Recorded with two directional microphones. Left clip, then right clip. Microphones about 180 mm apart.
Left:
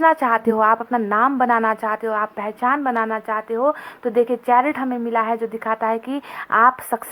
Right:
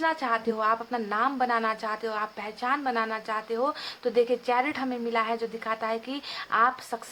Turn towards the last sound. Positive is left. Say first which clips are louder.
# left 9 dB
turn(degrees=40)  # may be behind; listen again after turning